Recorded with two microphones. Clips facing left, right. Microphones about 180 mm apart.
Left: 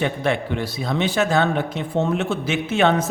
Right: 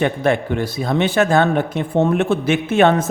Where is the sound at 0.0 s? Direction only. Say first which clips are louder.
Right 4 dB; 50° right (ahead or behind).